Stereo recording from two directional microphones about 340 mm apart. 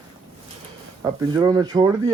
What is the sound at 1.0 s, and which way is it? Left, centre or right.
Speech, centre.